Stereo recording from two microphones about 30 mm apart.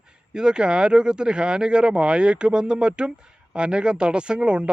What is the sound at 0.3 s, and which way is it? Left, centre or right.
Speech, right.